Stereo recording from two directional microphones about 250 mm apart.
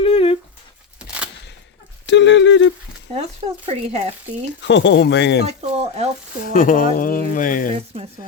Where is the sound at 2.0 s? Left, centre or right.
Left.